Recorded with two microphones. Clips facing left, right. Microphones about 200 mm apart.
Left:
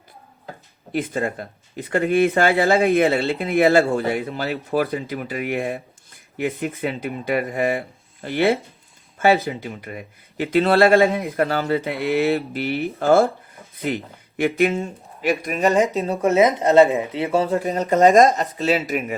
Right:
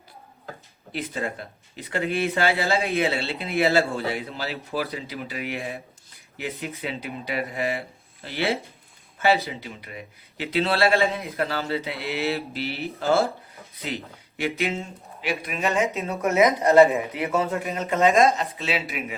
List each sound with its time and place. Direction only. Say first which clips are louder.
0.9 s speech: left 6 dB; 50° left (ahead or behind)